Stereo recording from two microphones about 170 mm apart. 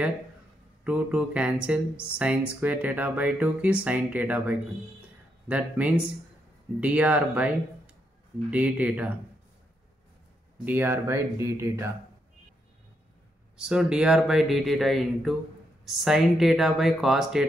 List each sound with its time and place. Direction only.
0.8 s speech: 5° right (ahead or behind)
10.6 s speech: 10° right (ahead or behind)
13.6 s speech: 5° right (ahead or behind)